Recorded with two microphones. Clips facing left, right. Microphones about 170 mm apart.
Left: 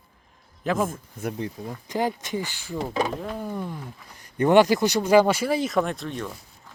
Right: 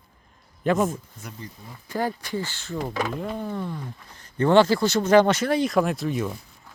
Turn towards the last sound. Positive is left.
turn(degrees=-5)  # may be behind; listen again after turning